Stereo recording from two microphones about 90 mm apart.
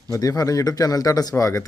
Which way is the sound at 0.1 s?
40° left (ahead or behind).